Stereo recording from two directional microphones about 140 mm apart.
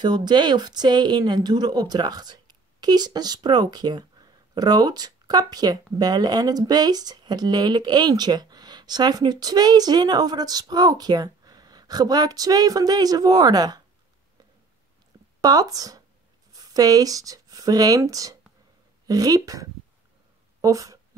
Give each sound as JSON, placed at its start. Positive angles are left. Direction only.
{"t": 0.0, "sound": "speech", "side_deg": -30}
{"t": 15.4, "sound": "speech", "side_deg": -25}
{"t": 20.6, "sound": "a sound", "side_deg": -25}